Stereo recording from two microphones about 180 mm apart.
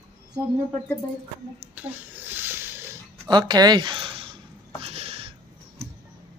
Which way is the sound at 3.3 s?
25° right (ahead or behind).